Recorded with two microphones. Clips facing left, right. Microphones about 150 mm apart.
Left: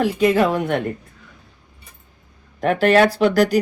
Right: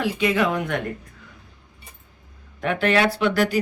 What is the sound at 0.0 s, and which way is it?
Speech, 40° left (ahead or behind).